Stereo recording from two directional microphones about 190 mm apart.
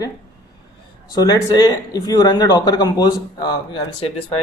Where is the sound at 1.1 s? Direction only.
20° left (ahead or behind).